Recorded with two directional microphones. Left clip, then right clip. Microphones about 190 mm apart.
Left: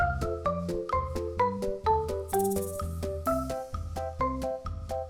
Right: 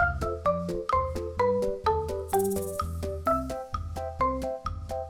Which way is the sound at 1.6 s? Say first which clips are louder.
Right 1 dB; centre (ahead or behind).